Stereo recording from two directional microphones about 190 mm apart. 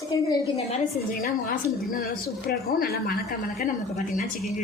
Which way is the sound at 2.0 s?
50° left (ahead or behind).